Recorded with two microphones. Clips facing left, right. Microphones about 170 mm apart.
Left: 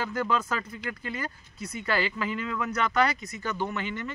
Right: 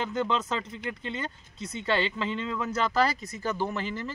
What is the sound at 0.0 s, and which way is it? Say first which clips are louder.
Speech: even; 25° right (ahead or behind).